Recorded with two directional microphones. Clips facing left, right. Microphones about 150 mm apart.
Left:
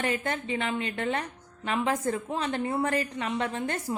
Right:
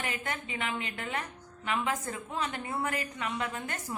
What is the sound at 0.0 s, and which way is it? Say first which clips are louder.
A woman's voice: left 7 dB; 35° left (ahead or behind).